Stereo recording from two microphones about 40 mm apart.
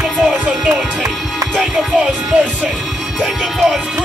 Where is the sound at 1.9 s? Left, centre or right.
Right.